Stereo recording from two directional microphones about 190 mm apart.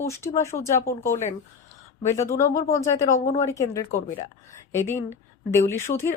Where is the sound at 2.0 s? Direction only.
15° left (ahead or behind).